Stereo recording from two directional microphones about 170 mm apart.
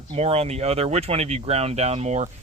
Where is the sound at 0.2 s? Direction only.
40° right (ahead or behind).